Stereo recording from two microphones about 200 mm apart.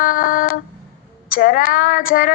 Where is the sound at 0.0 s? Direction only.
45° left (ahead or behind).